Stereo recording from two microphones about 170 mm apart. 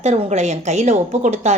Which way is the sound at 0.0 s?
40° right (ahead or behind).